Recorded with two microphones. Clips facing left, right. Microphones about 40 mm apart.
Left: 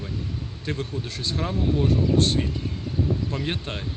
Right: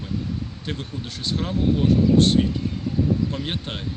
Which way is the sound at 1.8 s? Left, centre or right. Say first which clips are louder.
Right 3 dB; right.